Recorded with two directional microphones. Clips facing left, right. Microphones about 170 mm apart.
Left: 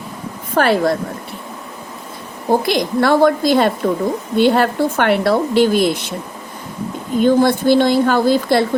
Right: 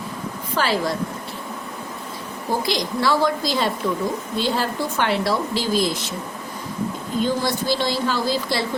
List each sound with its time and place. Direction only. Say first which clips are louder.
0.5 s speech: left 8 dB; 55° left (ahead or behind)
2.5 s speech: left 8 dB; 60° left (ahead or behind)
7.2 s speech: left 9 dB; 55° left (ahead or behind)